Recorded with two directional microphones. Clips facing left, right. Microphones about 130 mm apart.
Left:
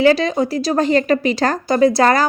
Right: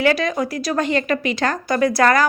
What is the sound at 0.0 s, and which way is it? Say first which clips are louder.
Speech: left 4 dB; 30° left (ahead or behind).